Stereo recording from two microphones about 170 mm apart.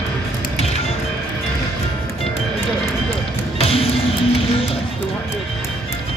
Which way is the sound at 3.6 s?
35° left (ahead or behind).